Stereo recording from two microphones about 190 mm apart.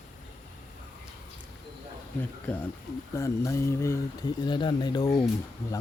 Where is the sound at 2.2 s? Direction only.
10° left (ahead or behind).